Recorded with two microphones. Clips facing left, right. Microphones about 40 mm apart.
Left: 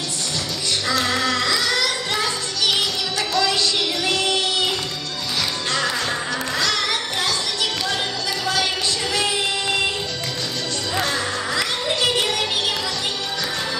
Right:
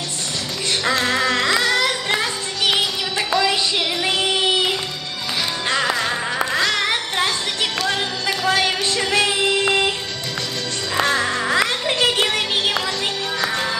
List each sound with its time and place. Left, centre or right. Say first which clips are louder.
0.8 s music: right 2 dB; right
4.0 s child singing: right 3 dB; right
5.7 s music: right 4 dB; right
11.0 s music: right 5 dB; right